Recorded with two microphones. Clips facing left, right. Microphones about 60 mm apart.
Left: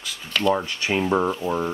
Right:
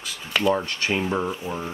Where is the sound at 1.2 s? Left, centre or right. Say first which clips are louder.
Left 5 dB; left.